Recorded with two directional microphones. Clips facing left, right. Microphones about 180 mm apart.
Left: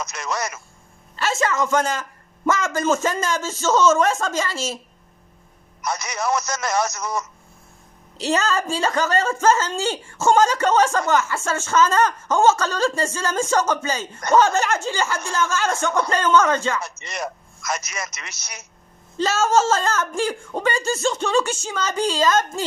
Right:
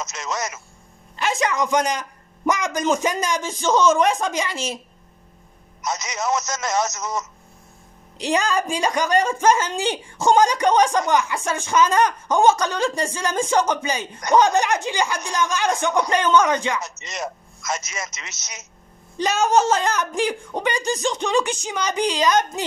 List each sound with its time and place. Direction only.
0.0 s a woman's voice: 25° right (ahead or behind)
5.8 s a woman's voice: 20° right (ahead or behind)